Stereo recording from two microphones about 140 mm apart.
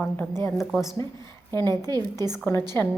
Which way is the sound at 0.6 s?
Centre (ahead or behind).